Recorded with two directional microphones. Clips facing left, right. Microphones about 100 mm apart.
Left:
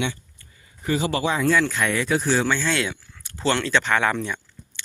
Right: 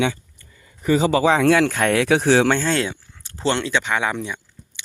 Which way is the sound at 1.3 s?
75° right (ahead or behind).